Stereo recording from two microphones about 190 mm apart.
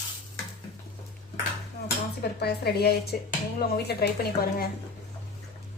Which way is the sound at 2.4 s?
55° left (ahead or behind).